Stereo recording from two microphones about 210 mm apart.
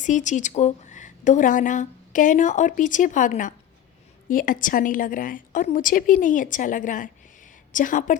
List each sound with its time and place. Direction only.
0.0 s a woman's voice: 35° left (ahead or behind)